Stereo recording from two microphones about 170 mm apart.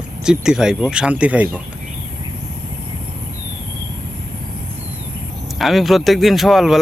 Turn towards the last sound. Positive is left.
turn(degrees=0)  # may be behind; listen again after turning